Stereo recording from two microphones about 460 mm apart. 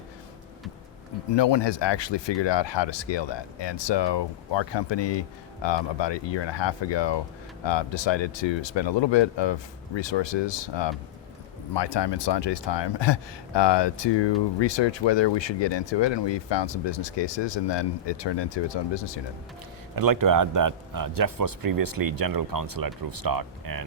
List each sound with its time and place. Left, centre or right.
1.3 s speech: left
20.0 s speech: right